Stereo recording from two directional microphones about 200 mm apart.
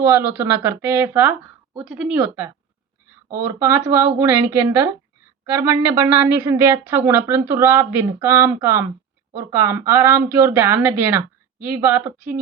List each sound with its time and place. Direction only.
0.0 s a woman's voice: 15° right (ahead or behind)
2.1 s a woman's voice: 15° right (ahead or behind)